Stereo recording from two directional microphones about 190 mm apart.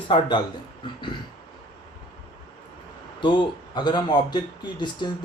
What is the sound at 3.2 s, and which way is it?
A man's voice, 25° left (ahead or behind).